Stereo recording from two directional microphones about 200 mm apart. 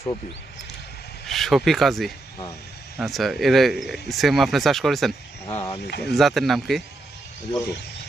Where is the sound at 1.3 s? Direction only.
Centre (ahead or behind).